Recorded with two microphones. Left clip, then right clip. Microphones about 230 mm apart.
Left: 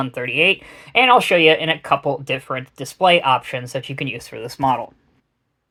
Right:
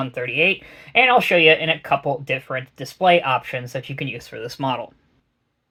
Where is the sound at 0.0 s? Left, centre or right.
Left.